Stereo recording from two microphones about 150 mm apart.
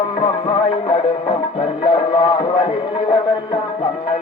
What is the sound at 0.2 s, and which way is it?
Music, 40° left (ahead or behind).